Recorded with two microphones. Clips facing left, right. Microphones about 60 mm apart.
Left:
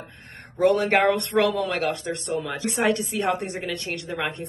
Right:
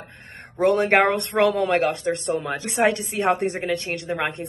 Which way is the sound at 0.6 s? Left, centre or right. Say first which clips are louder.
Right 2 dB; right.